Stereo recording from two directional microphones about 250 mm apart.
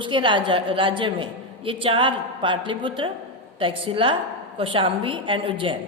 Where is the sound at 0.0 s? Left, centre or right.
Centre.